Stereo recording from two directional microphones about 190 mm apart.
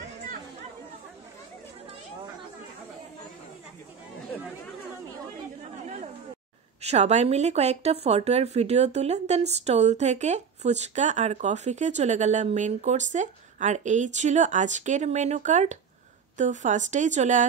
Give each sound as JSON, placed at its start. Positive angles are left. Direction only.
{"t": 5.6, "sound": "chatter", "side_deg": -40}
{"t": 6.8, "sound": "speech", "side_deg": -35}